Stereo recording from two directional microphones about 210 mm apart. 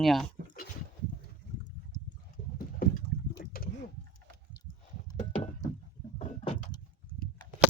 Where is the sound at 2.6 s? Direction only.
45° left (ahead or behind).